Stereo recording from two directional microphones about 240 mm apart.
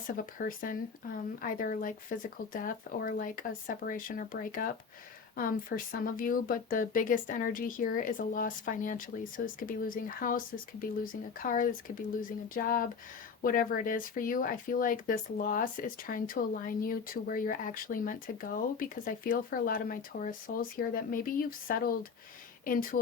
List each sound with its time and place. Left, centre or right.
0.2 s speech: left